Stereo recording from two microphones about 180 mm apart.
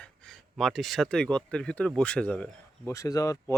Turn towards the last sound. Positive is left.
turn(degrees=20)  # may be behind; listen again after turning